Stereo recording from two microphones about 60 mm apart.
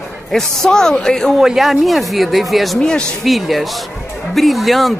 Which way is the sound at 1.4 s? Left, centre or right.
Centre.